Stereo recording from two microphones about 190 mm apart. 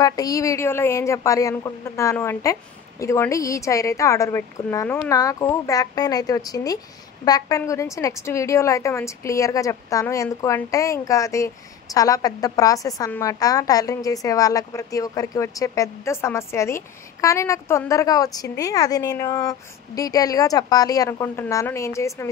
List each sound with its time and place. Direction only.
0.0 s a woman's voice: 20° left (ahead or behind)